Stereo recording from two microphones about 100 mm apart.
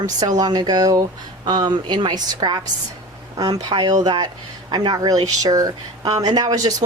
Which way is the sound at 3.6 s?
45° right (ahead or behind).